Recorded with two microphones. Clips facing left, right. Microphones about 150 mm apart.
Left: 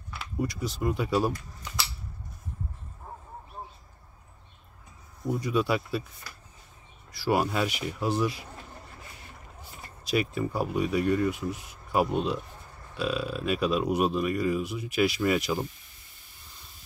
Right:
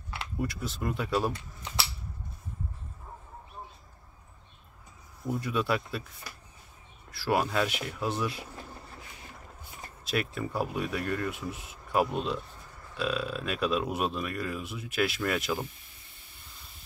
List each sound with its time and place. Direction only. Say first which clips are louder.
0.2 s speech: left 3 dB; centre (ahead or behind)
1.3 s speech: even; 30° right (ahead or behind)
5.2 s speech: left 3 dB; centre (ahead or behind)
7.1 s speech: left 2 dB; centre (ahead or behind)
10.0 s speech: left 4 dB; centre (ahead or behind)